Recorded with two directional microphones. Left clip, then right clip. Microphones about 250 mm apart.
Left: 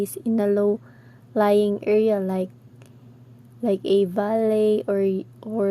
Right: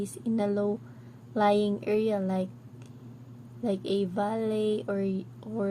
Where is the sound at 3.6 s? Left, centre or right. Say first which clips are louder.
Left 9 dB; left.